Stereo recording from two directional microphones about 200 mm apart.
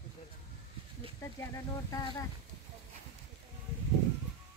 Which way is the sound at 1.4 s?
15° left (ahead or behind).